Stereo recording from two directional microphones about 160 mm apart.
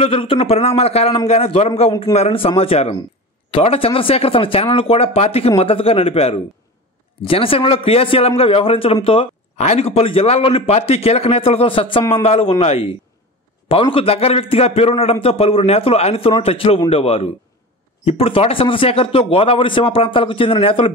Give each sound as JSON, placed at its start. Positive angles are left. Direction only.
{"t": 0.0, "sound": "a man's voice", "side_deg": 35}
{"t": 1.9, "sound": "a man's voice", "side_deg": 30}